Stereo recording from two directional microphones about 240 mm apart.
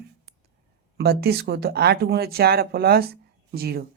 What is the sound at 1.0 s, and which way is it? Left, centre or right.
Speech, right.